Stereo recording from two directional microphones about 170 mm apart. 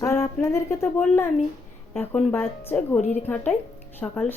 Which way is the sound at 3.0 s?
45° left (ahead or behind).